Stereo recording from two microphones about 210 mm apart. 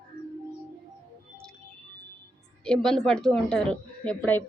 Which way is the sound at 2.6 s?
5° left (ahead or behind).